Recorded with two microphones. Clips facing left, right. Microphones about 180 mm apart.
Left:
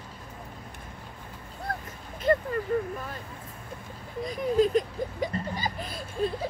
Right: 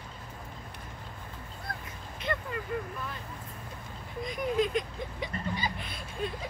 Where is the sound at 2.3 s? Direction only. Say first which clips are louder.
Left 10 dB; 40° left (ahead or behind).